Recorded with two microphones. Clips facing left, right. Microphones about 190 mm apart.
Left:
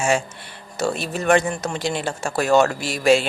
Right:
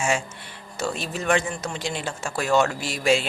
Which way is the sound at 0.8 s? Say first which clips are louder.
Left 5 dB; 65° left (ahead or behind).